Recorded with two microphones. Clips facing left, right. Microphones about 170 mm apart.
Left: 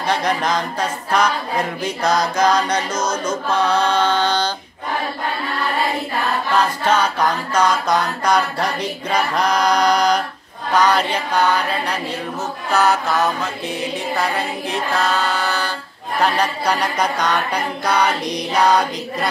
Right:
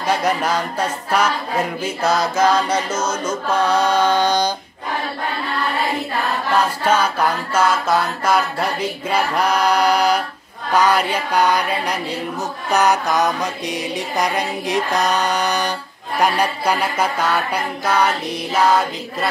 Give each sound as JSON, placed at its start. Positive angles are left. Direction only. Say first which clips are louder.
{"t": 0.0, "sound": "music", "louder": "right 1 dB", "side_deg": -10}
{"t": 6.5, "sound": "music", "louder": "right 1 dB", "side_deg": -10}